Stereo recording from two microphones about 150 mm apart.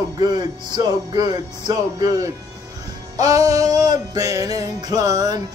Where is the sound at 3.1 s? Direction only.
25° right (ahead or behind).